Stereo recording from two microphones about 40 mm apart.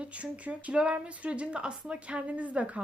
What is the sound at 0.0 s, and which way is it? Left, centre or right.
A woman's voice, right.